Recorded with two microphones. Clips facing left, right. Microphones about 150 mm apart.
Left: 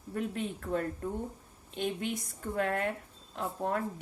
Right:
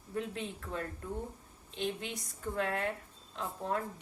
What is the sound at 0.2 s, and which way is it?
A woman's voice, 45° left (ahead or behind).